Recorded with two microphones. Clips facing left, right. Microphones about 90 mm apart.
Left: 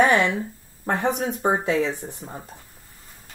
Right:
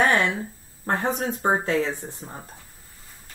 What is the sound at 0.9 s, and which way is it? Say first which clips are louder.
Speech: left 1 dB; 20° left (ahead or behind).